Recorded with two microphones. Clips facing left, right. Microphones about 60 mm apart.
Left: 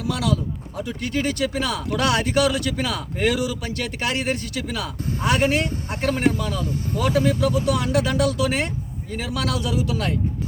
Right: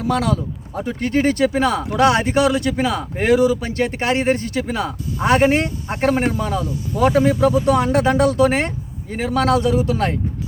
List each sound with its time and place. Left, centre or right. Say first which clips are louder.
0.0 s speech: right 4 dB; right